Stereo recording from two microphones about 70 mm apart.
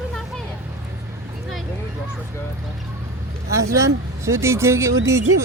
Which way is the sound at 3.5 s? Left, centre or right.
Right.